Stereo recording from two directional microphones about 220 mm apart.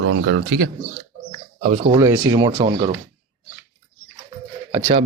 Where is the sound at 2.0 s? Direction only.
15° right (ahead or behind).